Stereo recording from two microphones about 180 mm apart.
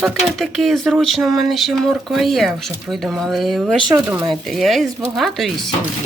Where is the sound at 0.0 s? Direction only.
Centre (ahead or behind).